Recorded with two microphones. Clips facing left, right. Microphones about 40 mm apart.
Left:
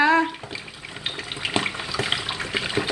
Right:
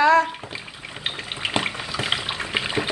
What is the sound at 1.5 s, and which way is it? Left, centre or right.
Water, centre.